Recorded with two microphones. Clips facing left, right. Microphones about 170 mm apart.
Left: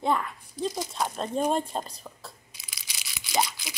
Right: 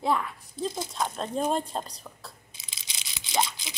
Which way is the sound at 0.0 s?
Centre (ahead or behind).